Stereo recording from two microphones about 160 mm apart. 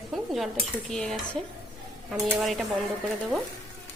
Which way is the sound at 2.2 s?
Centre (ahead or behind).